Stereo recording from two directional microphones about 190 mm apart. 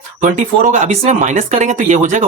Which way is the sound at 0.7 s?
40° right (ahead or behind).